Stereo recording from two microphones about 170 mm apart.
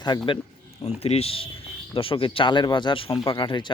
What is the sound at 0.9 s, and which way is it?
Speech, 40° left (ahead or behind).